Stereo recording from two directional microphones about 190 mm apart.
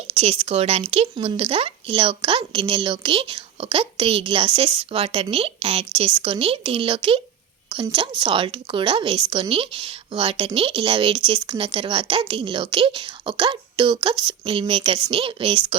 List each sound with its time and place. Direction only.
0.1 s speech: 30° right (ahead or behind)